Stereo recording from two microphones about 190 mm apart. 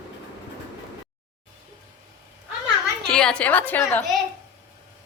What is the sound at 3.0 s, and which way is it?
A woman's voice, 5° left (ahead or behind).